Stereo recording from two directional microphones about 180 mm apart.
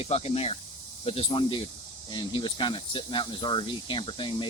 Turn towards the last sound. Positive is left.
turn(degrees=30)  # may be behind; listen again after turning